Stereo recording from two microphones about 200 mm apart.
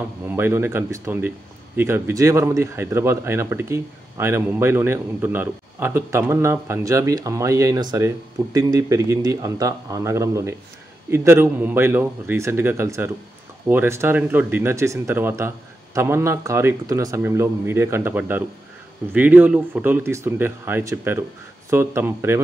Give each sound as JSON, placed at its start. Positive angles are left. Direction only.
{"t": 0.3, "sound": "speech", "side_deg": -10}